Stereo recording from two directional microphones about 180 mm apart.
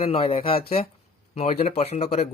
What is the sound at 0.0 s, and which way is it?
Speech, 30° left (ahead or behind).